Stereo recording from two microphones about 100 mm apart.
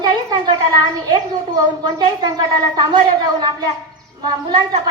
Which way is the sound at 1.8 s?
45° right (ahead or behind).